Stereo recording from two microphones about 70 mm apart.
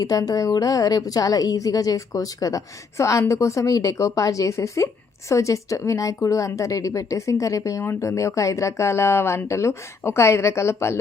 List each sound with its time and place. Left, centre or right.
0.0 s a woman's voice: left